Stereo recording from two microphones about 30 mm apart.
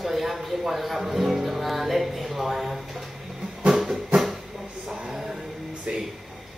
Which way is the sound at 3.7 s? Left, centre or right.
Centre.